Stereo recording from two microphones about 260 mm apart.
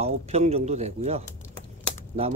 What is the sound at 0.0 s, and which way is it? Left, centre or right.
Speech, right.